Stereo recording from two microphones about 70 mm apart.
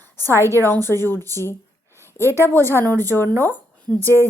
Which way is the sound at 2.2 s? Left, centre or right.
Right.